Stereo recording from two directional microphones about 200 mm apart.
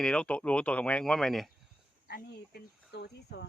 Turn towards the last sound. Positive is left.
turn(degrees=55)  # may be behind; listen again after turning